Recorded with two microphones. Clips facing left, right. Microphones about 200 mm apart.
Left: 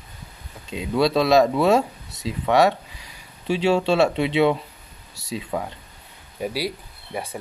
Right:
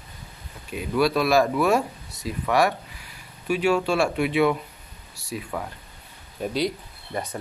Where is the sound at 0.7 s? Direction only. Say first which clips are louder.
Left 2 dB; 25° left (ahead or behind).